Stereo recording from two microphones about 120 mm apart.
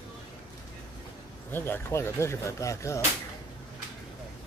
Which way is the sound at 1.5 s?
20° left (ahead or behind).